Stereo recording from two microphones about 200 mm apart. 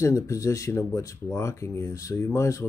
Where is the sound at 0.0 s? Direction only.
15° left (ahead or behind).